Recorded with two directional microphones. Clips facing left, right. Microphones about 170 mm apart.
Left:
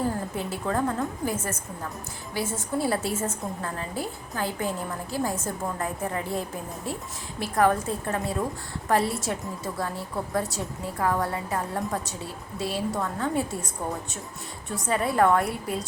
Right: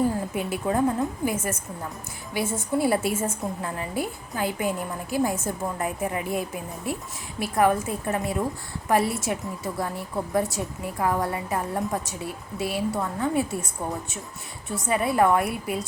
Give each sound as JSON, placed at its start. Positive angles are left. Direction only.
{"t": 0.3, "sound": "a woman's voice", "side_deg": -15}
{"t": 10.8, "sound": "a woman's voice", "side_deg": -15}
{"t": 14.8, "sound": "a woman's voice", "side_deg": -10}